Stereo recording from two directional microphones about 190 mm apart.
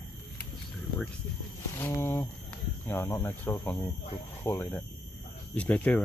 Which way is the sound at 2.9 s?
15° left (ahead or behind).